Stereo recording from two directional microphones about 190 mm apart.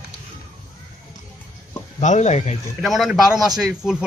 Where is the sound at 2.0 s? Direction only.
40° left (ahead or behind).